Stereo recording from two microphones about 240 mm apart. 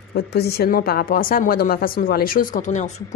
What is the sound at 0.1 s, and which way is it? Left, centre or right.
A woman's voice, left.